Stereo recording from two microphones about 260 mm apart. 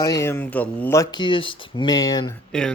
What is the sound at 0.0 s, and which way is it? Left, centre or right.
Speech, centre.